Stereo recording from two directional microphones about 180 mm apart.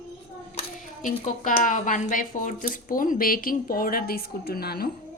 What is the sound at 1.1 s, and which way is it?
Speech, 40° left (ahead or behind).